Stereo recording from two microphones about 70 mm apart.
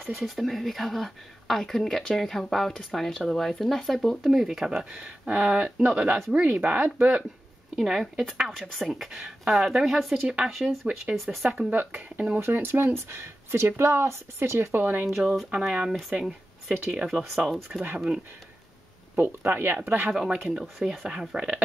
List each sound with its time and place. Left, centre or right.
0.0 s a woman's voice: centre; by 7.2 s right
7.7 s a woman's voice: centre
10.9 s speech: centre
12.4 s speech: right
14.8 s speech: right
15.0 s a woman's voice: centre
19.1 s speech: right
20.1 s speech: centre